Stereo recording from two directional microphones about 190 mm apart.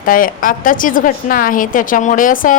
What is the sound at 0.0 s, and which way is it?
A woman's voice, 45° left (ahead or behind).